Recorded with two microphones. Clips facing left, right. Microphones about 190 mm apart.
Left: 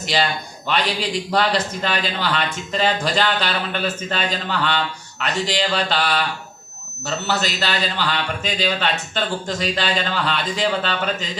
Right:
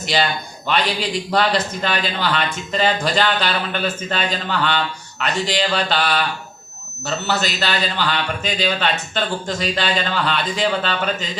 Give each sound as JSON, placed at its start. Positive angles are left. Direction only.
{"t": 0.1, "sound": "a man's voice", "side_deg": -55}
{"t": 1.3, "sound": "a man's voice", "side_deg": -60}